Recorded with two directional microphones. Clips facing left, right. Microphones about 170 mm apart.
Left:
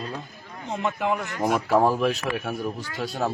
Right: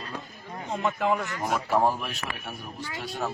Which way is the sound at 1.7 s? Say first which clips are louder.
Left 5 dB; 90° left.